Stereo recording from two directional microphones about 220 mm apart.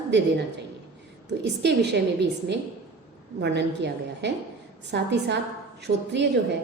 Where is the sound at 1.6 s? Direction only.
50° right (ahead or behind).